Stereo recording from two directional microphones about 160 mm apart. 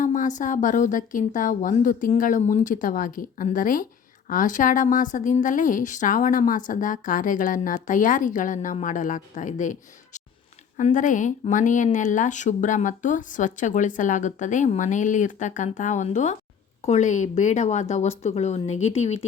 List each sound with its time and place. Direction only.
0.0 s a woman's voice: 50° left (ahead or behind)